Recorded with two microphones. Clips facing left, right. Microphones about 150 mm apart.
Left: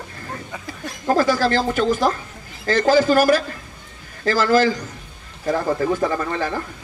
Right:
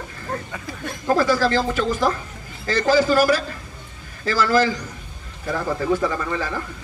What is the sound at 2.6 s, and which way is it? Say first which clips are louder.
Speech: left 2 dB; 50° left (ahead or behind).